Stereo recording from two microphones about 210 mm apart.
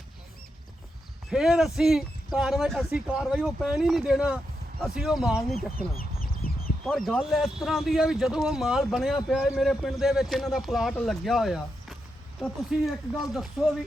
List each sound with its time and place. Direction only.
1.3 s speech: centre (ahead or behind)
6.4 s chicken: 45° left (ahead or behind)
6.8 s speech: centre (ahead or behind)